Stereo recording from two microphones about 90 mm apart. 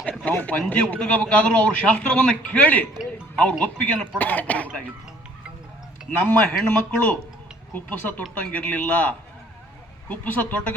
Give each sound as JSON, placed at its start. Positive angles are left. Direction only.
{"t": 0.3, "sound": "speech", "side_deg": 20}
{"t": 3.1, "sound": "music", "side_deg": 15}
{"t": 3.6, "sound": "speech", "side_deg": 15}
{"t": 6.1, "sound": "speech", "side_deg": 20}